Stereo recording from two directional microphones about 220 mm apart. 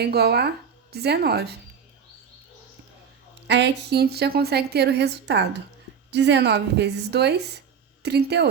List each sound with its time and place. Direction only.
0.0 s a woman's voice: 45° right (ahead or behind)
3.4 s a woman's voice: 50° right (ahead or behind)